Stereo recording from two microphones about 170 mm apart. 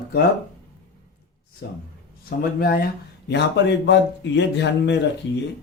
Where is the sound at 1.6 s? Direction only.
80° left.